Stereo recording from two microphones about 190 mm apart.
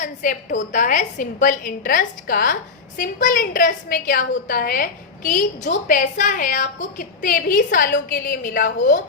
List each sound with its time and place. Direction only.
0.0 s a woman's voice: 45° left (ahead or behind)